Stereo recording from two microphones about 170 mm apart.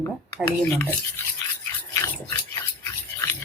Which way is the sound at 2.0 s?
15° left (ahead or behind).